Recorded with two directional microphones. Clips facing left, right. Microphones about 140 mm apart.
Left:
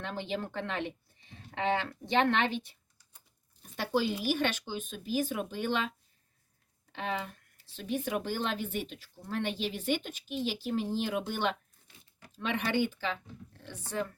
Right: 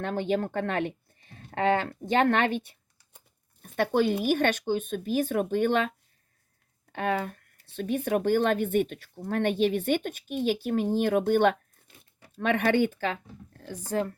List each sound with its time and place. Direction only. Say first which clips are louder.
0.0 s speech: right 8 dB; 50° right (ahead or behind)
6.9 s speech: right 7 dB; 50° right (ahead or behind)